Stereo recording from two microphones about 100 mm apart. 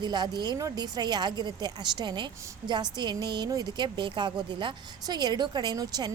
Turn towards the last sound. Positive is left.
turn(degrees=-40)  # may be behind; listen again after turning